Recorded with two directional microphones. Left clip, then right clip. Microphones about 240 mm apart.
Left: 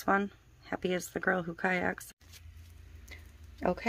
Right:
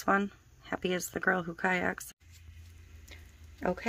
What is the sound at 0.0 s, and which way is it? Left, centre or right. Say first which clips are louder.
Speech: right 1 dB; centre.